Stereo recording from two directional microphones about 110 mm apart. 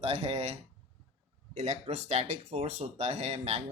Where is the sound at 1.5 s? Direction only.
90° right.